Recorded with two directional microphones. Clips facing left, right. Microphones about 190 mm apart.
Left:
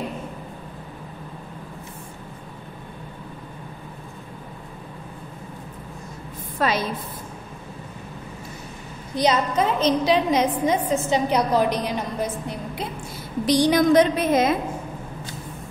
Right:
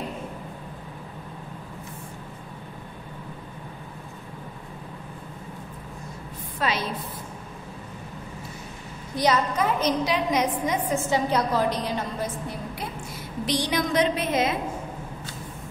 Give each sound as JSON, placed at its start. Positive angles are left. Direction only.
{"t": 6.6, "sound": "a woman's voice", "side_deg": 45}
{"t": 9.1, "sound": "a woman's voice", "side_deg": 20}
{"t": 13.5, "sound": "a woman's voice", "side_deg": 40}